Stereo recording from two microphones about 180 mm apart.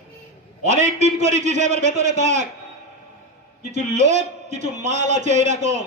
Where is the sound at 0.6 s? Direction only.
40° right (ahead or behind).